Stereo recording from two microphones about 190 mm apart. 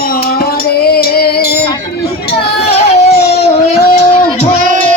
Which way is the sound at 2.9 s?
35° left (ahead or behind).